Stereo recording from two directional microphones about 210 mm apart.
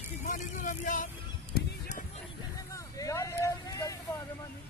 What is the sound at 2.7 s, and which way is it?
Vehicle, 15° left (ahead or behind).